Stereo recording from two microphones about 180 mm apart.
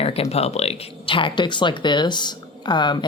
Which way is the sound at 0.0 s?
35° left (ahead or behind).